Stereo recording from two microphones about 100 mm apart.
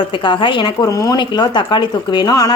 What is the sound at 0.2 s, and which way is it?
Speech, 50° left (ahead or behind).